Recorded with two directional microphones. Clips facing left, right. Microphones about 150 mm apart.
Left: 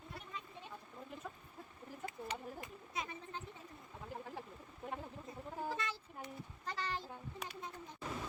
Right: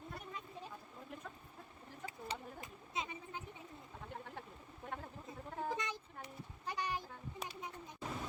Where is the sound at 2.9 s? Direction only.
20° right (ahead or behind).